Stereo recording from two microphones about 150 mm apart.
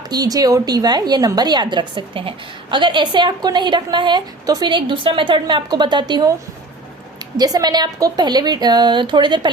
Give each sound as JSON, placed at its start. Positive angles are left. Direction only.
{"t": 0.1, "sound": "a woman's voice", "side_deg": -25}
{"t": 7.3, "sound": "a woman's voice", "side_deg": -25}